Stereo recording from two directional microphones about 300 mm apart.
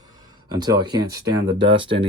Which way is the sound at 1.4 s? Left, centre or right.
Right.